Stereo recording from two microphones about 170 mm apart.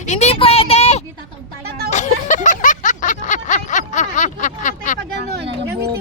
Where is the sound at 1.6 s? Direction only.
70° right (ahead or behind).